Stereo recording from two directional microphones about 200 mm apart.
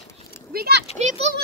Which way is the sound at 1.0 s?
35° right (ahead or behind).